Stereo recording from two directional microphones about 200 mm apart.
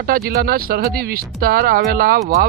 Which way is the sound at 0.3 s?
50° right (ahead or behind).